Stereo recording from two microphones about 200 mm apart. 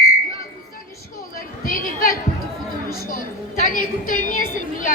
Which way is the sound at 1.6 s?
45° left (ahead or behind).